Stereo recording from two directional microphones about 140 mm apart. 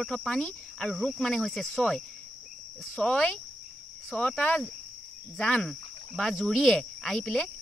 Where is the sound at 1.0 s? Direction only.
5° left (ahead or behind).